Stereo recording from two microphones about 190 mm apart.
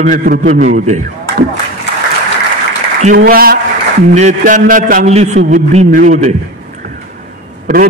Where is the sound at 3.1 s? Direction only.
50° right (ahead or behind).